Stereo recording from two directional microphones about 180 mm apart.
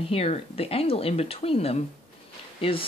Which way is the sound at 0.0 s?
35° left (ahead or behind).